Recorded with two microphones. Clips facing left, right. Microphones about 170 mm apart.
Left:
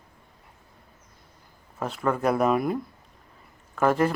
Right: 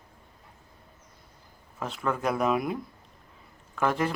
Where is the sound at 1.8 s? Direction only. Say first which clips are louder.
Left 4 dB; 5° left (ahead or behind).